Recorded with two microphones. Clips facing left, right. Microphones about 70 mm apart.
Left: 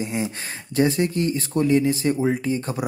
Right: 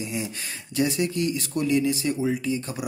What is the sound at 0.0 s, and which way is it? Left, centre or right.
Speech, left.